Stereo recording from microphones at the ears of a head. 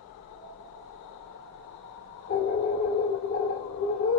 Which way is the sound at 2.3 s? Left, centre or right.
Left.